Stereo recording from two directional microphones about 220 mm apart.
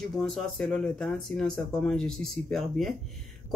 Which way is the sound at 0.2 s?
Centre (ahead or behind).